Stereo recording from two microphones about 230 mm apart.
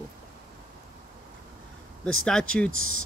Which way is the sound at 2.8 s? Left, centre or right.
Left.